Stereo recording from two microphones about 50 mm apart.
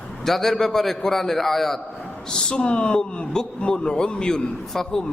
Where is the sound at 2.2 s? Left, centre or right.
Centre.